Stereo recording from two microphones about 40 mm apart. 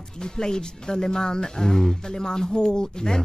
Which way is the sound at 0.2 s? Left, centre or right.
Centre.